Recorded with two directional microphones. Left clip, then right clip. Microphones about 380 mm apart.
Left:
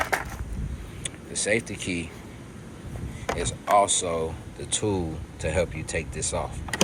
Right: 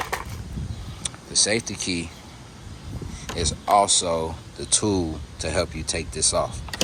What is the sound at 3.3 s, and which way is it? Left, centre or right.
Speech, centre.